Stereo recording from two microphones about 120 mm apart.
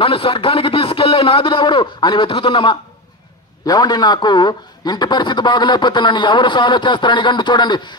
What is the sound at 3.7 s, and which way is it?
A man's voice, 35° left (ahead or behind).